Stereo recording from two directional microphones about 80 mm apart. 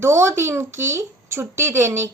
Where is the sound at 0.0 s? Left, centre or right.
Right.